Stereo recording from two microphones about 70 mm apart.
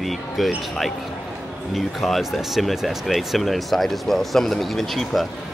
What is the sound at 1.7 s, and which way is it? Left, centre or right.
Speech, centre.